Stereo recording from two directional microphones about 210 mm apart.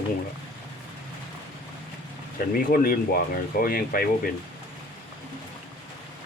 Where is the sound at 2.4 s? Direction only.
45° left (ahead or behind).